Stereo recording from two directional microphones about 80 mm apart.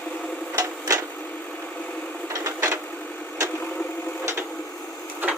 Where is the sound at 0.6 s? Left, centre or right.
Right.